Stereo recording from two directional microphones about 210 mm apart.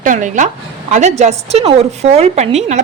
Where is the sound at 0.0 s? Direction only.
35° right (ahead or behind).